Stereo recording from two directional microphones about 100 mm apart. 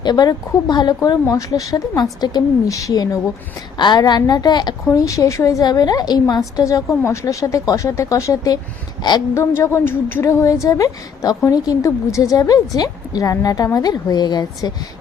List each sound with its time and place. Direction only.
0.0 s a woman's voice: 45° left (ahead or behind)
4.9 s a woman's voice: 35° left (ahead or behind)
9.0 s a woman's voice: 45° left (ahead or behind)
9.3 s a woman's voice: 25° left (ahead or behind); by 14.7 s 45° left (ahead or behind)